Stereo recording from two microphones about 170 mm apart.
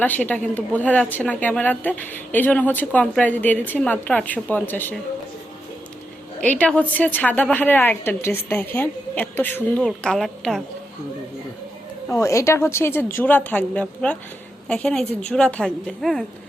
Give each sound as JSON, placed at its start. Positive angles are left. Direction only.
{"t": 0.0, "sound": "a woman's voice", "side_deg": 10}
{"t": 6.4, "sound": "a woman's voice", "side_deg": 10}
{"t": 12.1, "sound": "a woman's voice", "side_deg": 20}